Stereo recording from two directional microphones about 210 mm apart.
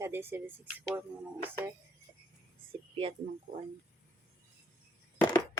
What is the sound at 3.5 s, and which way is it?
Speech, 45° right (ahead or behind).